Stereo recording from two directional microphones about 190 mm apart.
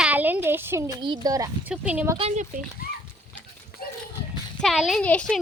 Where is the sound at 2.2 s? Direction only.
35° right (ahead or behind).